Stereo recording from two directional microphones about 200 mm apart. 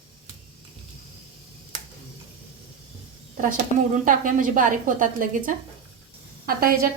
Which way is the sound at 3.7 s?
40° left (ahead or behind).